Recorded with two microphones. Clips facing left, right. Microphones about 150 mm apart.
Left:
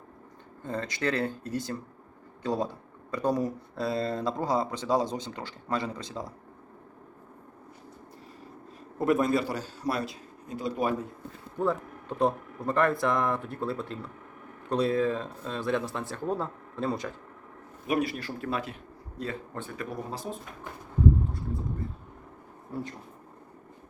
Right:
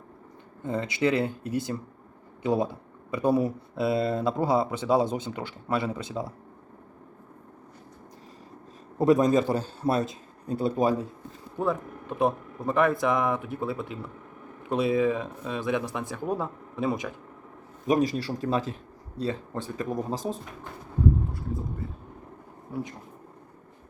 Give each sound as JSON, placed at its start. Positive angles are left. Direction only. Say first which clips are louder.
{"t": 0.6, "sound": "speech", "louder": "right 5 dB", "side_deg": -10}
{"t": 2.4, "sound": "speech", "louder": "right 4 dB", "side_deg": -5}
{"t": 9.0, "sound": "a man's voice", "louder": "right 4 dB", "side_deg": -15}
{"t": 11.6, "sound": "speech", "louder": "right 1 dB", "side_deg": -10}
{"t": 17.8, "sound": "speech", "louder": "right 5 dB", "side_deg": -40}
{"t": 22.7, "sound": "speech", "louder": "right 2 dB", "side_deg": -15}